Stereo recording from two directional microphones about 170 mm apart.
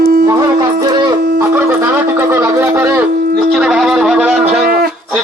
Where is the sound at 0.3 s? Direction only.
20° right (ahead or behind).